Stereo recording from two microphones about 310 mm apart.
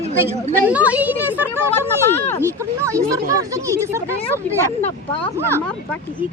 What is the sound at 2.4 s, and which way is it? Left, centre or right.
Speech, centre.